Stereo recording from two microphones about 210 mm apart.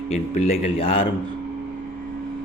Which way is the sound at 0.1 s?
30° left (ahead or behind).